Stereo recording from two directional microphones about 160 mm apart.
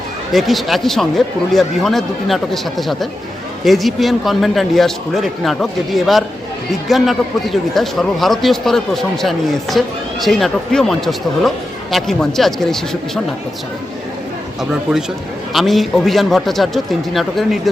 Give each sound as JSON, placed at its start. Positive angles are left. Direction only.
{"t": 0.3, "sound": "speech", "side_deg": 0}
{"t": 14.6, "sound": "speech", "side_deg": -5}